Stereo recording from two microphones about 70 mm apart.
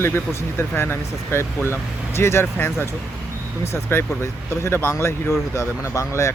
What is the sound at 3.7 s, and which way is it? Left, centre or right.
Speech, left.